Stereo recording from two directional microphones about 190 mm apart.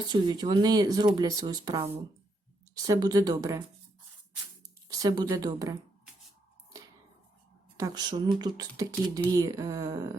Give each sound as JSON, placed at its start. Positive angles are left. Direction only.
{"t": 0.1, "sound": "speech", "side_deg": -25}
{"t": 4.9, "sound": "speech", "side_deg": -20}
{"t": 7.8, "sound": "speech", "side_deg": -20}